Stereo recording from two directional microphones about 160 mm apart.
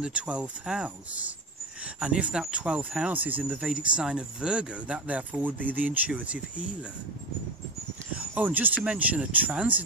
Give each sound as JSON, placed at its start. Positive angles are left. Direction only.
{"t": 0.0, "sound": "speech", "side_deg": -5}
{"t": 8.4, "sound": "speech", "side_deg": -10}